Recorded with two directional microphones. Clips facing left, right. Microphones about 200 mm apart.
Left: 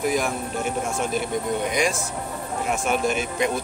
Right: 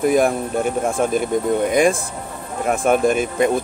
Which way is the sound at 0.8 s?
55° right (ahead or behind).